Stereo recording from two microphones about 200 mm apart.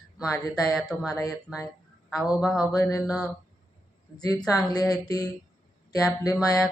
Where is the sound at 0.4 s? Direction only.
20° left (ahead or behind).